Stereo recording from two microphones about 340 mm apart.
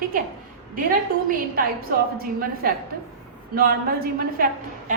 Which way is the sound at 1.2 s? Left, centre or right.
Right.